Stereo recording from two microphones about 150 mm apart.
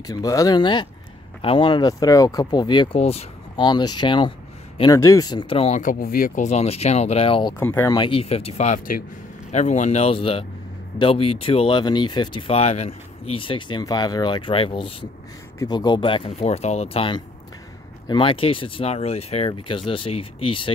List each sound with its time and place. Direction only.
0.0 s speech: 25° left (ahead or behind)
3.0 s speech: 45° left (ahead or behind)
3.5 s speech: 30° left (ahead or behind)
5.8 s speech: 70° left (ahead or behind); by 7.5 s 35° left (ahead or behind)
7.5 s speech: 15° left (ahead or behind)
7.9 s speech: 35° left (ahead or behind); by 9.0 s 65° left (ahead or behind)
9.5 s speech: 50° left (ahead or behind); by 20.7 s 35° left (ahead or behind)